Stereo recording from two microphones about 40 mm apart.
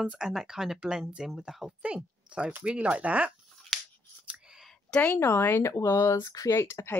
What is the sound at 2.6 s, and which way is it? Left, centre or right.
Speech, right.